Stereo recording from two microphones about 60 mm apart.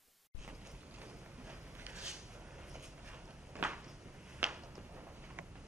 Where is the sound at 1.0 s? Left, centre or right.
Centre.